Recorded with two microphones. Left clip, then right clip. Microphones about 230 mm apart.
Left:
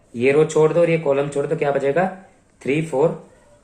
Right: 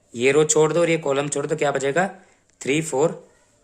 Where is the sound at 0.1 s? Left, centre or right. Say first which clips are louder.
Left 1 dB; right.